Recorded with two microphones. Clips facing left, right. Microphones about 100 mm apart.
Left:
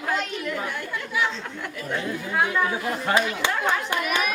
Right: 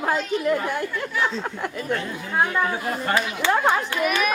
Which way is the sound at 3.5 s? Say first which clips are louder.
Right 5 dB; 45° right (ahead or behind).